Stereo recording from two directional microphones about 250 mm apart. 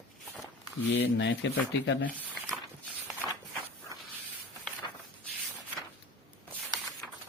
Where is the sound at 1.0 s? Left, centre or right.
Left.